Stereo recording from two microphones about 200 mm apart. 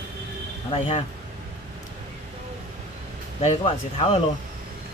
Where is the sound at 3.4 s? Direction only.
30° left (ahead or behind).